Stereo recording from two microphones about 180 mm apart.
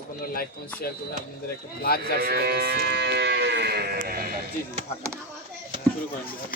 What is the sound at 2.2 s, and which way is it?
Moo, 65° right (ahead or behind).